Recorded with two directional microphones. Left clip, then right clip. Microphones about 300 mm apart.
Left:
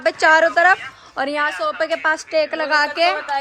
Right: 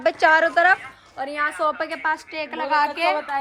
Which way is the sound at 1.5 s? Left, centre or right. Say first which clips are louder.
Left 3 dB; centre.